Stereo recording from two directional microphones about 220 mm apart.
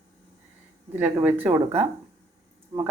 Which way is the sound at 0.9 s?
10° right (ahead or behind).